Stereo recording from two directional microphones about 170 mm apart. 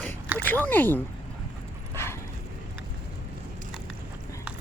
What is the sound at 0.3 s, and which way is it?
Speech, 10° left (ahead or behind).